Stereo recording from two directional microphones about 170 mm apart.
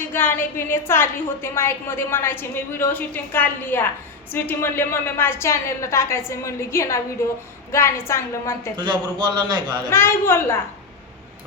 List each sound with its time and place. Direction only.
0.1 s a woman's voice: 10° left (ahead or behind)
8.7 s a man's voice: 25° right (ahead or behind)
9.9 s a woman's voice: 15° left (ahead or behind)